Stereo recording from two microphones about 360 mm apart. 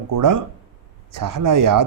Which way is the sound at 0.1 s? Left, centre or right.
Right.